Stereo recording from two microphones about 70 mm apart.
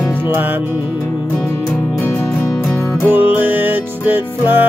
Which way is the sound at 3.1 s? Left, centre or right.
Right.